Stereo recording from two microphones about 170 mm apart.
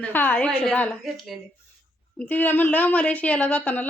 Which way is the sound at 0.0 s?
10° left (ahead or behind).